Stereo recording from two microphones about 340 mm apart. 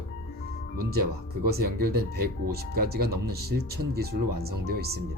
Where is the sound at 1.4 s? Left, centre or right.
Right.